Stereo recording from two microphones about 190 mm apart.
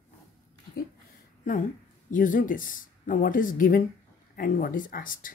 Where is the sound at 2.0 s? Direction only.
45° left (ahead or behind).